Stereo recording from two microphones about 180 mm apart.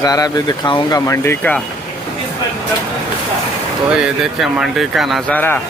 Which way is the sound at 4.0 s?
5° right (ahead or behind).